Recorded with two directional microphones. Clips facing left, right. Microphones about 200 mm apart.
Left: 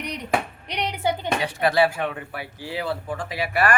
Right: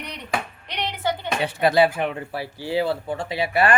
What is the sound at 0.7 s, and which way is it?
Music, 15° left (ahead or behind).